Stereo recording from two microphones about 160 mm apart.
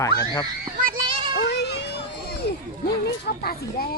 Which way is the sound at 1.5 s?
90° left.